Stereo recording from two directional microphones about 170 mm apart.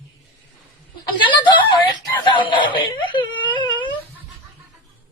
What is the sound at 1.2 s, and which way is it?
A woman's voice, 30° left (ahead or behind).